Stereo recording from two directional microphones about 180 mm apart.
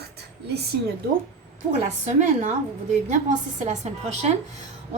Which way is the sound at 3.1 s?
40° right (ahead or behind).